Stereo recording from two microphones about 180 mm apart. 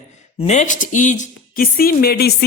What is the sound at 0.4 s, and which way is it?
A man's voice, 40° left (ahead or behind).